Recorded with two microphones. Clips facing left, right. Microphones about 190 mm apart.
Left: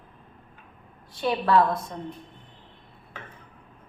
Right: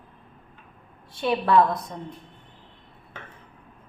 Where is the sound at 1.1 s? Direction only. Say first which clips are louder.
Right 1 dB; 20° right (ahead or behind).